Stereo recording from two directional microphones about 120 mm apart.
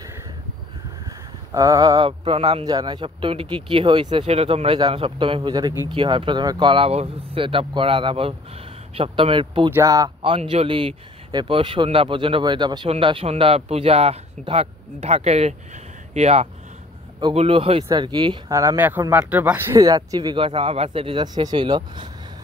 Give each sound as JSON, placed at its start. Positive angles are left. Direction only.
{"t": 1.0, "sound": "a sound", "side_deg": -30}
{"t": 2.0, "sound": "speech", "side_deg": -50}
{"t": 2.6, "sound": "speech", "side_deg": -35}
{"t": 4.3, "sound": "speech", "side_deg": -60}
{"t": 9.8, "sound": "speech", "side_deg": -30}
{"t": 10.2, "sound": "speech", "side_deg": -50}
{"t": 12.9, "sound": "speech", "side_deg": -50}
{"t": 17.3, "sound": "speech", "side_deg": -50}
{"t": 17.8, "sound": "speech", "side_deg": -40}
{"t": 18.5, "sound": "speech", "side_deg": -25}
{"t": 19.7, "sound": "speech", "side_deg": -30}
{"t": 20.3, "sound": "speech", "side_deg": -50}